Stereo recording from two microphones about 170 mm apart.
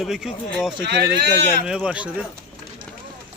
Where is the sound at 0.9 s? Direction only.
80° right.